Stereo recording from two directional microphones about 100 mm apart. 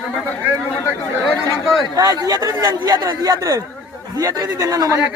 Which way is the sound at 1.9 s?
35° right (ahead or behind).